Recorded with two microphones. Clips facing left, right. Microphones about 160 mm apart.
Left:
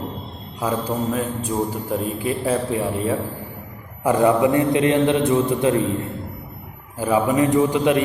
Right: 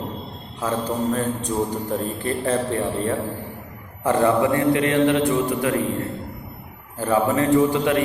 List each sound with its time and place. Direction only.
0.6 s a man's voice: 10° left (ahead or behind)
7.0 s a man's voice: 15° left (ahead or behind)